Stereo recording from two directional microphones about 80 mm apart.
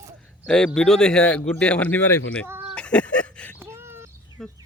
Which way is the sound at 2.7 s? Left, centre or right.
Centre.